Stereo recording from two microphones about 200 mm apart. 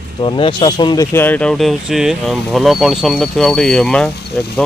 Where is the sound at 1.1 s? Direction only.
10° left (ahead or behind).